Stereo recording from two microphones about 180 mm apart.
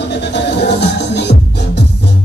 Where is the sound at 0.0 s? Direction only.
70° left (ahead or behind).